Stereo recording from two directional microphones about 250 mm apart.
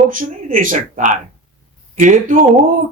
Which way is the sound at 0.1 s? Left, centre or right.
Right.